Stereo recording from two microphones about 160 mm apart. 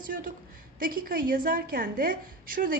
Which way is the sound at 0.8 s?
65° right (ahead or behind).